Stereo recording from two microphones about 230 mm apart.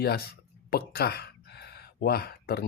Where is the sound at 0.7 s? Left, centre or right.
Left.